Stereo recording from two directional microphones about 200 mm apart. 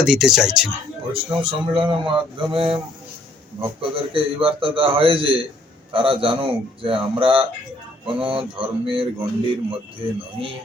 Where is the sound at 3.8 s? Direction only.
25° right (ahead or behind).